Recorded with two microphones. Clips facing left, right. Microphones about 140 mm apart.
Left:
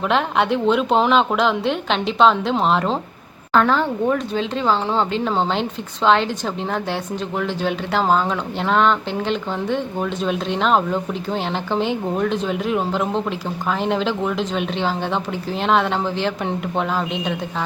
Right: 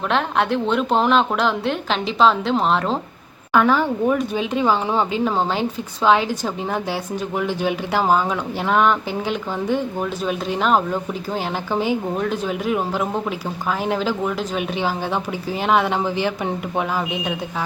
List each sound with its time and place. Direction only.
0.1 s speech: centre (ahead or behind)